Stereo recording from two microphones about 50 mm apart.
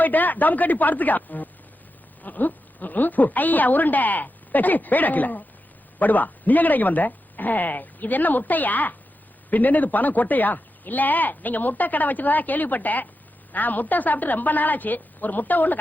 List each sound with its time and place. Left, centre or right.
0.0 s speech: left